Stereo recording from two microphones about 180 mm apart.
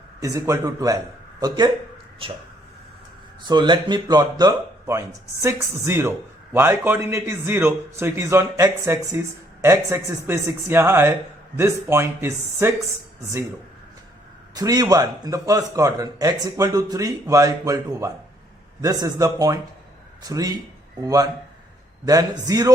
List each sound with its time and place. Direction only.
0.2 s a man's voice: 15° right (ahead or behind)
3.5 s speech: 25° right (ahead or behind)
14.5 s a man's voice: 20° right (ahead or behind)